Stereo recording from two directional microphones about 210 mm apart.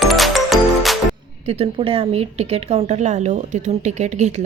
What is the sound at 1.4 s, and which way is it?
A woman's voice, 30° right (ahead or behind).